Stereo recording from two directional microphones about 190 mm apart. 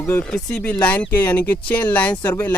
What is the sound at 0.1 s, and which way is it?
Speech, 5° left (ahead or behind).